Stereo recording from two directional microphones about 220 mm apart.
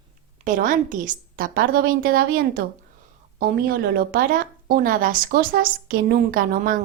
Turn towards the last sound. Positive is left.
turn(degrees=-40)  # may be behind; listen again after turning